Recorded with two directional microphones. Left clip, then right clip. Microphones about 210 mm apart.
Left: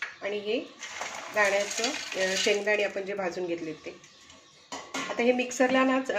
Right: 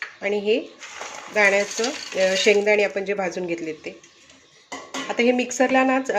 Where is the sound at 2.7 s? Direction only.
35° right (ahead or behind).